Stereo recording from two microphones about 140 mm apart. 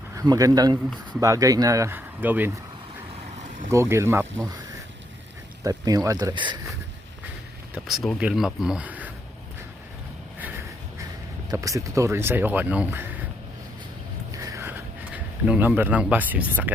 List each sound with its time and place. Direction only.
0.2 s speech: 25° right (ahead or behind)
3.7 s speech: 20° right (ahead or behind)
5.6 s speech: 25° right (ahead or behind)
7.9 s speech: centre (ahead or behind)
11.5 s speech: 25° right (ahead or behind)
14.3 s a sound: 25° right (ahead or behind)